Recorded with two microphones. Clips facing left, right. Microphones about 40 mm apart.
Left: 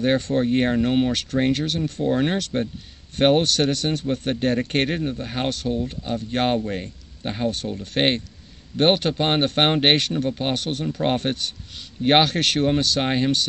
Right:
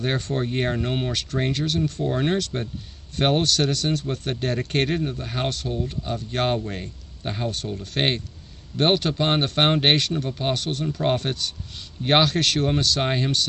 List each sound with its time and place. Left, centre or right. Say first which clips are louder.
0.4 s speech: left 5 dB; centre
11.1 s speech: left 2 dB; left